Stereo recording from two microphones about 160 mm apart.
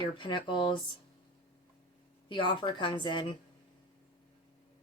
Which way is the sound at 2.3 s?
30° left (ahead or behind).